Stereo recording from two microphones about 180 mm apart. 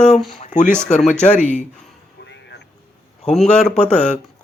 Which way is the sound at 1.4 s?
40° left (ahead or behind).